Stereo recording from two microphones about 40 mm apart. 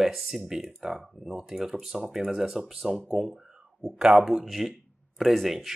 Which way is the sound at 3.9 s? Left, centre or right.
Right.